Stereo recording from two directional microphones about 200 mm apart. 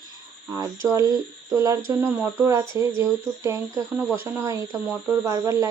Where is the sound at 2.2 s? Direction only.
10° right (ahead or behind).